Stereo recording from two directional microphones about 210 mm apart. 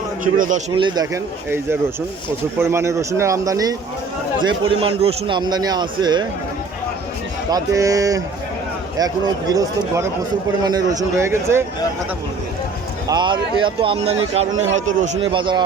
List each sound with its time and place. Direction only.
0.3 s a man's voice: 40° right (ahead or behind)
0.8 s a man's voice: 20° right (ahead or behind)
7.5 s a man's voice: 15° right (ahead or behind)
13.1 s a man's voice: 20° right (ahead or behind)
15.3 s a man's voice: 25° right (ahead or behind)